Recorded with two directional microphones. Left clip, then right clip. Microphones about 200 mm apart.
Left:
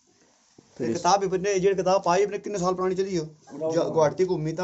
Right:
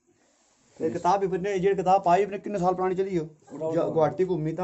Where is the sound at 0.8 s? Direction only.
Centre (ahead or behind).